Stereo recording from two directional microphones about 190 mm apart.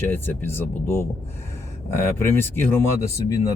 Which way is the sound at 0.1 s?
10° left (ahead or behind).